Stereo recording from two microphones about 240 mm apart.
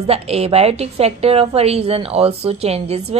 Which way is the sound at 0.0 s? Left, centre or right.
Right.